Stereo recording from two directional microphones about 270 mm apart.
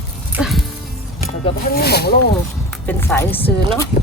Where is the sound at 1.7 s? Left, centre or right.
Left.